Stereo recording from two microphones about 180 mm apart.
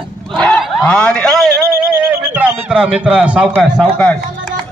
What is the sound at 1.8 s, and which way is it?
A man's voice, 10° right (ahead or behind).